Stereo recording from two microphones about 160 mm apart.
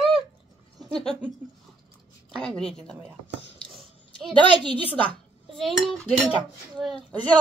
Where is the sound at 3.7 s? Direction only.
5° left (ahead or behind).